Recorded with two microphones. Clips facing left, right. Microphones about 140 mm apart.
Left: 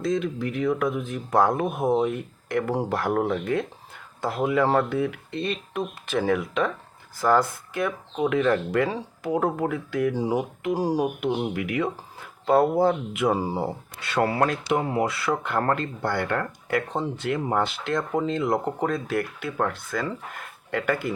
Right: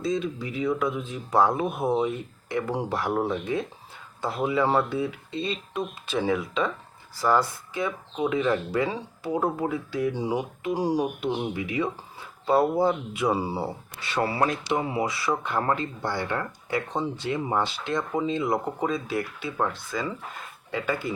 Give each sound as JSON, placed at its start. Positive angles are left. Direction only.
{"t": 0.0, "sound": "speech", "side_deg": 55}
{"t": 11.5, "sound": "speech", "side_deg": 60}
{"t": 14.1, "sound": "speech", "side_deg": 55}